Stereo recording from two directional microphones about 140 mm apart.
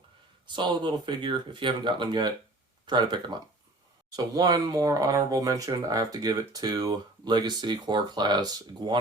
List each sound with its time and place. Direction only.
0.4 s speech: 35° right (ahead or behind)